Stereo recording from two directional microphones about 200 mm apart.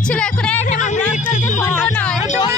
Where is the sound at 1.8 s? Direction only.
10° left (ahead or behind).